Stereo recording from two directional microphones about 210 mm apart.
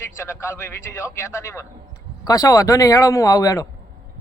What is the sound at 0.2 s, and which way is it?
A man's voice, 10° left (ahead or behind).